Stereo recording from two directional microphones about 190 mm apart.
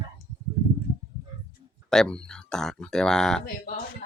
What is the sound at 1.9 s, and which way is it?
Speech, 5° left (ahead or behind).